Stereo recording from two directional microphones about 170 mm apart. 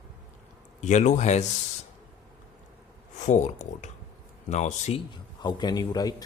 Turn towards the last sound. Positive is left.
turn(degrees=20)  # may be behind; listen again after turning